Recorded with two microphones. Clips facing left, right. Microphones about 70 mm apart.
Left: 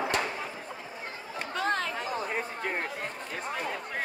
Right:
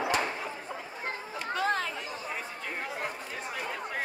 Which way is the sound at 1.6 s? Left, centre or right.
Centre.